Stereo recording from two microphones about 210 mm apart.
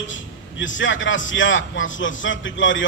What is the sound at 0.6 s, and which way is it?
A man's voice, 65° left (ahead or behind).